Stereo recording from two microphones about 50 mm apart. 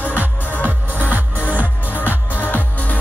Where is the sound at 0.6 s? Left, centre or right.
Right.